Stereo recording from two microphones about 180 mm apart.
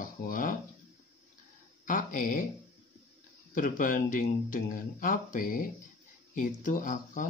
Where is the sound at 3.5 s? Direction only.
50° left (ahead or behind).